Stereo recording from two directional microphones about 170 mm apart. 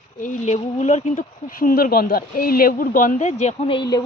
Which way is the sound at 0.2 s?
40° left (ahead or behind).